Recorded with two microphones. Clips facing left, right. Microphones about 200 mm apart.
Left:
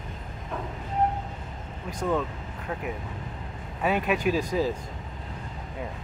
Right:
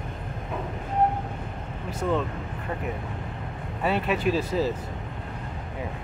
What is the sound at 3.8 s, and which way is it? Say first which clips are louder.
Speech: even; 10° left (ahead or behind).